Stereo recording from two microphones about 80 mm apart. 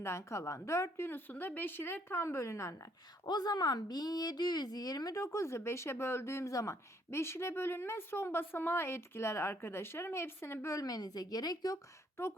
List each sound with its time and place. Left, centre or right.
0.0 s a woman's voice: left
3.2 s a woman's voice: left
10.8 s speech: left